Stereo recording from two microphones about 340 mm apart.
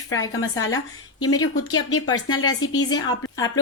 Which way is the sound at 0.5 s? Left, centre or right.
Left.